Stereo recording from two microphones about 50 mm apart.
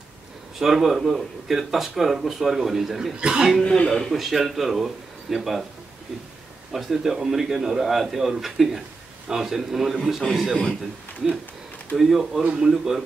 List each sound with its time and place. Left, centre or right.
0.6 s a man's voice: centre
3.2 s speech: centre
3.8 s speech: centre
4.1 s a man's voice: centre
6.7 s a man's voice: centre